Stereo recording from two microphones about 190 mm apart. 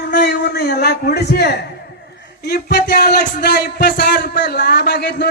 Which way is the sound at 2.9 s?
50° left (ahead or behind).